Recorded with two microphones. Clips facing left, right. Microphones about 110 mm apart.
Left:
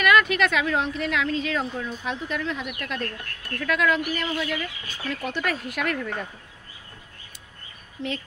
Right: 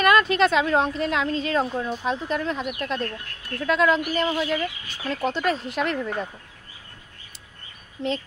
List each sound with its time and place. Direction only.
0.0 s a woman's voice: 35° right (ahead or behind)